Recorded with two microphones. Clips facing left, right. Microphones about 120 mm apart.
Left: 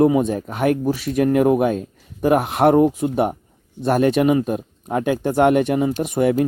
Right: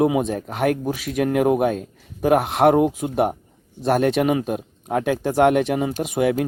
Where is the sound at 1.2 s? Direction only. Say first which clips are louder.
Left 3 dB; 60° right (ahead or behind).